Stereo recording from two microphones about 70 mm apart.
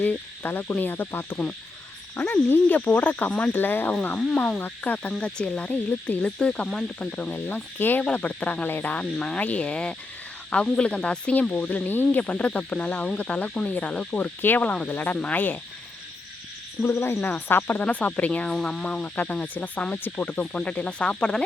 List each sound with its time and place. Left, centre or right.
0.0 s cricket: left
4.2 s insect: centre
4.6 s cricket: left
5.2 s insect: centre
7.3 s cricket: left
16.8 s speech: left
17.2 s cricket: left
17.8 s insect: left
19.0 s cricket: left